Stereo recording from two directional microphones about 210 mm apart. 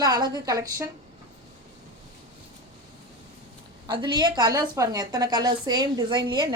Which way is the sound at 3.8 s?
20° right (ahead or behind).